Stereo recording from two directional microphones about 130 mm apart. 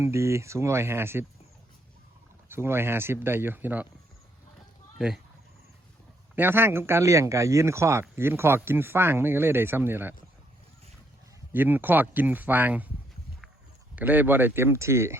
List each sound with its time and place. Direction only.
0.0 s a man's voice: 20° right (ahead or behind)
2.5 s speech: 20° right (ahead or behind)
4.9 s speech: 5° right (ahead or behind)
6.3 s a man's voice: 15° right (ahead or behind)
11.5 s speech: 15° right (ahead or behind)
13.9 s speech: 15° right (ahead or behind)